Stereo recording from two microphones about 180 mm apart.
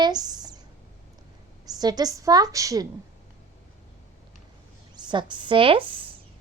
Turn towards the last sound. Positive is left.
turn(degrees=-30)  # may be behind; listen again after turning